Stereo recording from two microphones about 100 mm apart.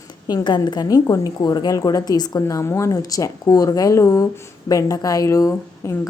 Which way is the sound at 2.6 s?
30° left (ahead or behind).